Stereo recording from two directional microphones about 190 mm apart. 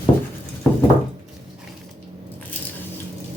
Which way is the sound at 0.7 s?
5° left (ahead or behind).